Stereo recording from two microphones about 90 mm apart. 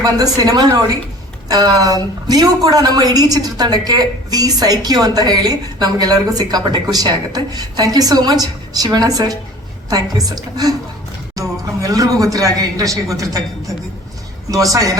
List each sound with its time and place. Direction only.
0.0 s a woman's voice: 50° right (ahead or behind)
14.5 s speech: 40° right (ahead or behind)